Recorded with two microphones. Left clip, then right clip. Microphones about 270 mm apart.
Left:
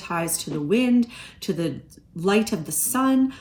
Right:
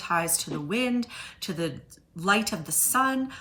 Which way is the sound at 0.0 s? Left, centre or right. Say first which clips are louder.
Even; right.